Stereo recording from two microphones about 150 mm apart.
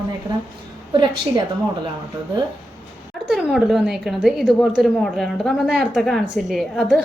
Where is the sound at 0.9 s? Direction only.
30° right (ahead or behind).